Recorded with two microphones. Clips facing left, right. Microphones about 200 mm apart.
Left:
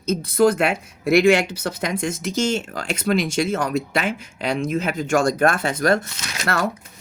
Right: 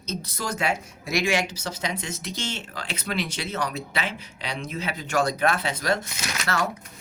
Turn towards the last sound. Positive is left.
turn(degrees=55)  # may be behind; listen again after turning